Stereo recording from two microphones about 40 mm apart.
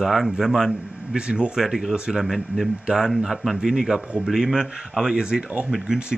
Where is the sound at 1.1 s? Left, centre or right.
Right.